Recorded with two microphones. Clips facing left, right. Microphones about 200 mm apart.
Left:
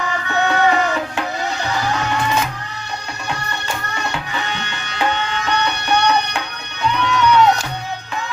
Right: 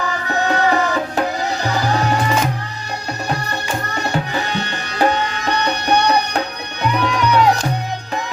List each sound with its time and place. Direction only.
0.3 s music: 35° right (ahead or behind)
3.9 s tabla: 35° right (ahead or behind)
7.0 s music: 35° right (ahead or behind)